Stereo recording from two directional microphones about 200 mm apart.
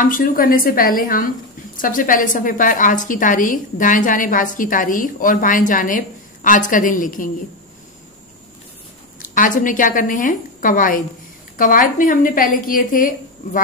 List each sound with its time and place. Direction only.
0.0 s a woman's voice: 45° left (ahead or behind)
9.2 s a woman's voice: 40° left (ahead or behind)